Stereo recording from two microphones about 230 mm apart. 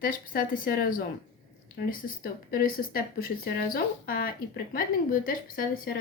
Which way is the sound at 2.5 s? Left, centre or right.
Left.